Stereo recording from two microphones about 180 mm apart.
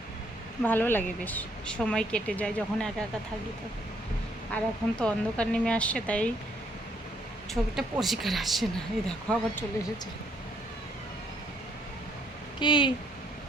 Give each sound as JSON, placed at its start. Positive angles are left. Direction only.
{"t": 0.6, "sound": "speech", "side_deg": 10}
{"t": 4.5, "sound": "speech", "side_deg": 5}
{"t": 7.5, "sound": "a woman's voice", "side_deg": 0}
{"t": 12.5, "sound": "speech", "side_deg": 25}